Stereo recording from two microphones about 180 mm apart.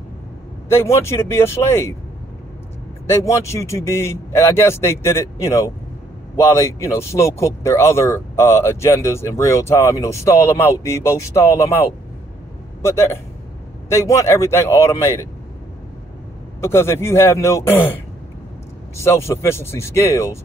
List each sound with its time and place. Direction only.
0.7 s a man's voice: 15° left (ahead or behind)
3.1 s speech: 15° left (ahead or behind)
16.6 s speech: 15° left (ahead or behind)
18.9 s speech: 15° left (ahead or behind)